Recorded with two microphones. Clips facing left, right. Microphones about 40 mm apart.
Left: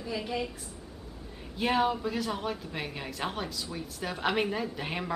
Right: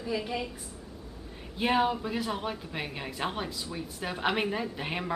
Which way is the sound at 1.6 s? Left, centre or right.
Centre.